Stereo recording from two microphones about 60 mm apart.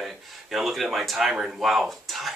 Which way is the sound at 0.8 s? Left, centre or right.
Centre.